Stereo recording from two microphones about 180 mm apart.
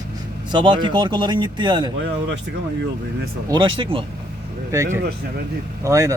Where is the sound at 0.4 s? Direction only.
25° right (ahead or behind).